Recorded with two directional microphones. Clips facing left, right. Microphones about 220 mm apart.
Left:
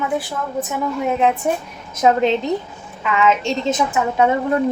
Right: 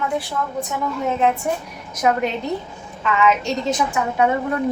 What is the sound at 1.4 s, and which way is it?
A woman's voice, 20° left (ahead or behind).